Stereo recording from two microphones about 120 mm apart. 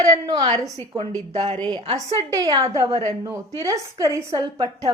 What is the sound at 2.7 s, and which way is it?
A woman's voice, 25° right (ahead or behind).